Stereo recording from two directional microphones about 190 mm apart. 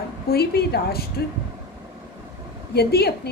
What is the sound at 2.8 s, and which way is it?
Speech, 55° left (ahead or behind).